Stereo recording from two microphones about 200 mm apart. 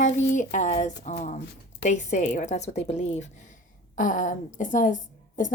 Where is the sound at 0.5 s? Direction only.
35° left (ahead or behind).